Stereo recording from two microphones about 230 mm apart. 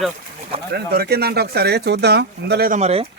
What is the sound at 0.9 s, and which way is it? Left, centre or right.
Speech, right.